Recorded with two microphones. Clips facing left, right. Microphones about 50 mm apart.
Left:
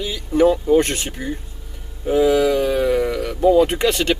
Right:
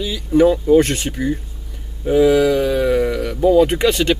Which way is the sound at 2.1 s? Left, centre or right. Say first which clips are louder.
Right 2 dB; centre.